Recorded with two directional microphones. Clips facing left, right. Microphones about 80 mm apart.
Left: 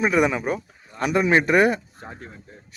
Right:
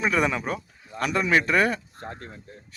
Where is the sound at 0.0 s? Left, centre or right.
Centre.